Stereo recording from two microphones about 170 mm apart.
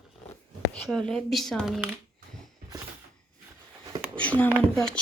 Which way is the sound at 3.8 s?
20° right (ahead or behind).